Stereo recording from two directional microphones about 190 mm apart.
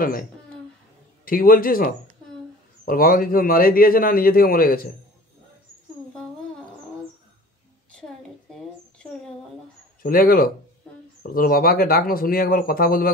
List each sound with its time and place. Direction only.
0.0 s a man's voice: 50° left (ahead or behind)
10.0 s a man's voice: 50° left (ahead or behind)